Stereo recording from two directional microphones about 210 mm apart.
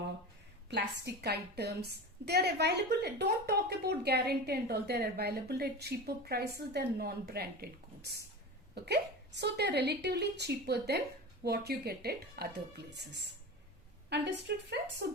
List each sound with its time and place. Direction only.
0.7 s a woman's voice: 55° right (ahead or behind)
8.7 s a woman's voice: 50° right (ahead or behind)